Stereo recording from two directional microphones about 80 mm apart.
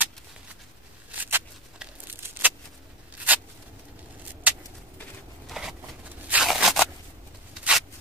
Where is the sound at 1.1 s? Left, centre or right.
Right.